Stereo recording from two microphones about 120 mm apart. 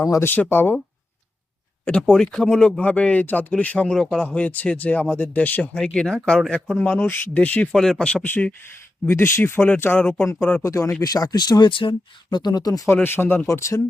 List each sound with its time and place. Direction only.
0.0 s speech: 20° left (ahead or behind)
1.8 s speech: 10° left (ahead or behind)
6.8 s speech: 15° left (ahead or behind)
10.6 s speech: 25° left (ahead or behind)
12.9 s speech: 20° left (ahead or behind)